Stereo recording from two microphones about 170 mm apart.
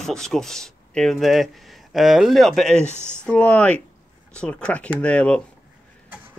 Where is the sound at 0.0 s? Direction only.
Centre (ahead or behind).